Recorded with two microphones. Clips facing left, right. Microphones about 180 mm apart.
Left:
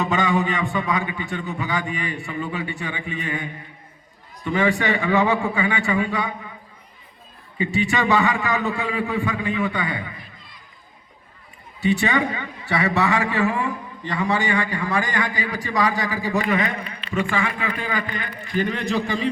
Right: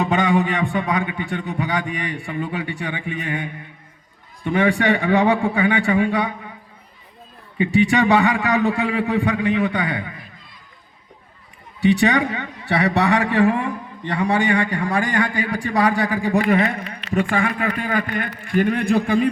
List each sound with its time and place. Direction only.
0.0 s a man's voice: 60° right (ahead or behind)
7.6 s a man's voice: 60° right (ahead or behind)
11.8 s a man's voice: 65° right (ahead or behind); by 16.8 s 45° right (ahead or behind)
17.1 s a man's voice: 65° right (ahead or behind)